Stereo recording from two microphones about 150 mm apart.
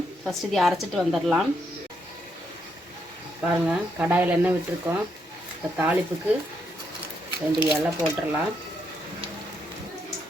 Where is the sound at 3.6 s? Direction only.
10° right (ahead or behind).